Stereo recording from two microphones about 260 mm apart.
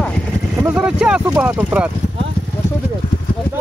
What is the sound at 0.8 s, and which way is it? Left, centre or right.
Boat, centre.